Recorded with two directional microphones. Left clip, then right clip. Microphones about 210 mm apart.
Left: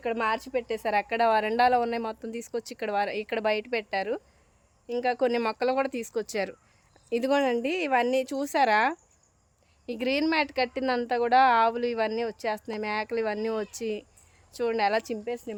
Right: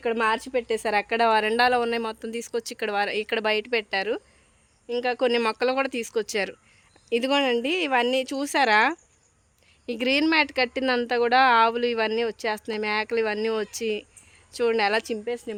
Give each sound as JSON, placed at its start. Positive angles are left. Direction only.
{"t": 0.0, "sound": "a woman's voice", "side_deg": -25}
{"t": 1.5, "sound": "a woman's voice", "side_deg": 0}
{"t": 14.5, "sound": "a woman's voice", "side_deg": -15}